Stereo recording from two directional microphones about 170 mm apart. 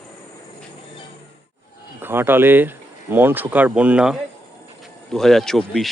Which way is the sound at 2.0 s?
15° right (ahead or behind).